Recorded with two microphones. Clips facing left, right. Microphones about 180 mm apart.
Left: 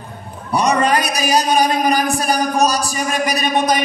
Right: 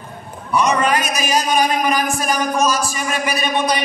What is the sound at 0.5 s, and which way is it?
A man's voice, 35° left (ahead or behind).